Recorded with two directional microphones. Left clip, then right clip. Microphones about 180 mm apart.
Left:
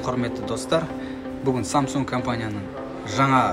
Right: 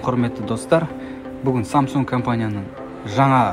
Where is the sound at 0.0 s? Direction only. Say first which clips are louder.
Right 4 dB; 40° right (ahead or behind).